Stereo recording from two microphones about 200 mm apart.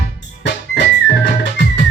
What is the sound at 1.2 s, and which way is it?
Music, 60° left (ahead or behind).